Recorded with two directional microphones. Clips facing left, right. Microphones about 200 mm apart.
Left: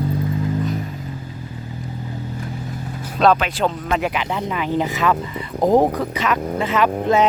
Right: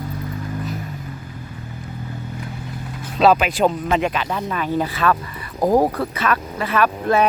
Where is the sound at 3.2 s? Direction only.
10° right (ahead or behind).